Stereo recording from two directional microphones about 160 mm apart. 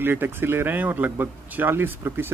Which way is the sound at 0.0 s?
15° right (ahead or behind).